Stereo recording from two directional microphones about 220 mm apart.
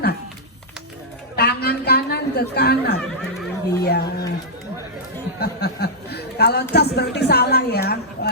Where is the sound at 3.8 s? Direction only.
45° left (ahead or behind).